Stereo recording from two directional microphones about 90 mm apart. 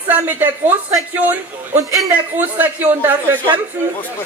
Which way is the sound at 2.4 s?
20° right (ahead or behind).